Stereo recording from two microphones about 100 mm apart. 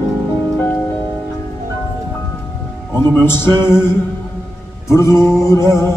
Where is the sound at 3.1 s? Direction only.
25° left (ahead or behind).